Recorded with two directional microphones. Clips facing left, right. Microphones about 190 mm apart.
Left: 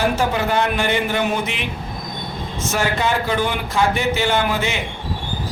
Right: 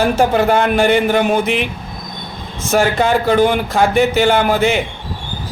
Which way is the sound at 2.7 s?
45° right (ahead or behind).